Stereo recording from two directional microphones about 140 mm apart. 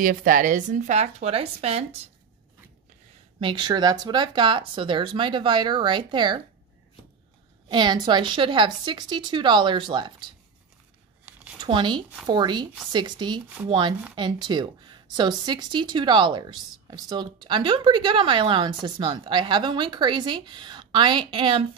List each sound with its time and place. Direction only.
0.0 s speech: 75° right (ahead or behind); by 1.9 s 45° right (ahead or behind)
3.3 s a woman's voice: 35° right (ahead or behind)
7.6 s a woman's voice: 30° right (ahead or behind)
11.2 s a sound: 10° right (ahead or behind)
11.6 s a woman's voice: 35° right (ahead or behind)